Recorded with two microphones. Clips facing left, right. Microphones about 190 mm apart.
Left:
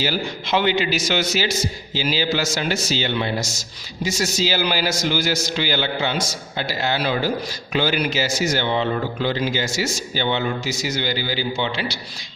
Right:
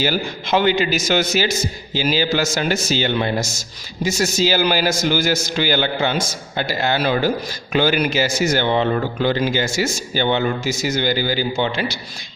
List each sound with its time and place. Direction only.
0.0 s speech: 50° right (ahead or behind)